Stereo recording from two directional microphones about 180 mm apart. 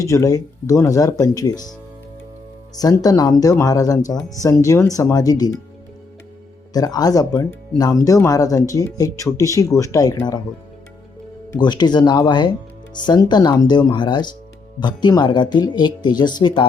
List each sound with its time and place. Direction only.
0.0 s speech: 20° left (ahead or behind)
2.7 s speech: 20° left (ahead or behind)
6.7 s speech: 20° left (ahead or behind)
11.5 s speech: 25° left (ahead or behind)